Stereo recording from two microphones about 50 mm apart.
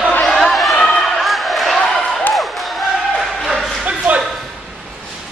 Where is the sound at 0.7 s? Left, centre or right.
Centre.